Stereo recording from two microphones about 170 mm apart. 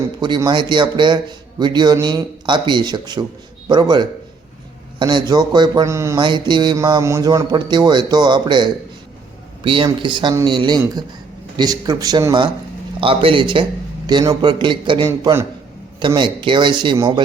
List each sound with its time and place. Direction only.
0.2 s a man's voice: 25° right (ahead or behind)
6.1 s a man's voice: 25° right (ahead or behind)